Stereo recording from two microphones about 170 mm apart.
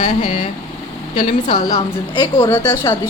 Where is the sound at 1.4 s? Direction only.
25° left (ahead or behind).